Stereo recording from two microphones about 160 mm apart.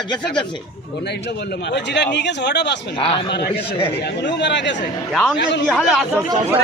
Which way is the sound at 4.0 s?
90° left.